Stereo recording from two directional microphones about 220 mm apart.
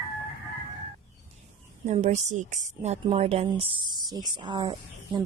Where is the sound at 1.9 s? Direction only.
30° right (ahead or behind).